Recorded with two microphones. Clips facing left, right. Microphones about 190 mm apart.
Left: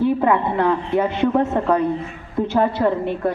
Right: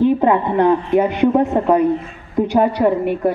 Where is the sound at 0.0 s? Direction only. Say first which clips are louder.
Right 3 dB; 20° right (ahead or behind).